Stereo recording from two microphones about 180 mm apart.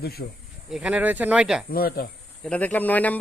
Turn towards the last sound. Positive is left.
turn(degrees=10)  # may be behind; listen again after turning